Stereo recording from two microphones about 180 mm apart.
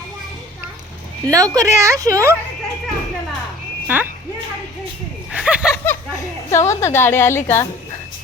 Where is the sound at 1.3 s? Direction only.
20° right (ahead or behind).